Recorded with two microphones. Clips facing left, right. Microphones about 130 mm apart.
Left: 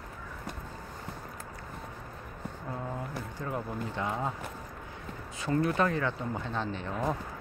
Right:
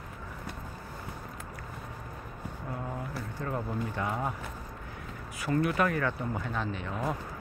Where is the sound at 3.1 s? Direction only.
15° left (ahead or behind).